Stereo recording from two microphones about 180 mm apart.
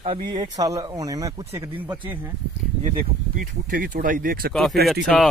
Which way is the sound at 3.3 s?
50° right (ahead or behind).